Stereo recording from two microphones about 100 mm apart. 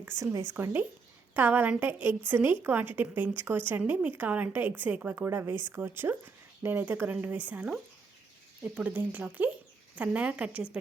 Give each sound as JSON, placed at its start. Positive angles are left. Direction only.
{"t": 0.0, "sound": "a woman's voice", "side_deg": -25}
{"t": 8.7, "sound": "speech", "side_deg": -15}